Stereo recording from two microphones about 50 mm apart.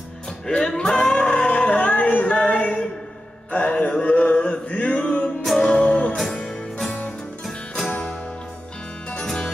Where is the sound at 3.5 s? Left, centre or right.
Left.